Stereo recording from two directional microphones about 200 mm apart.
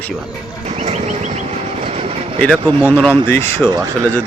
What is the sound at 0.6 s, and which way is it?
Vehicle, 35° right (ahead or behind).